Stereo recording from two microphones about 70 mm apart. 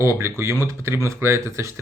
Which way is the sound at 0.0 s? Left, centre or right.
Right.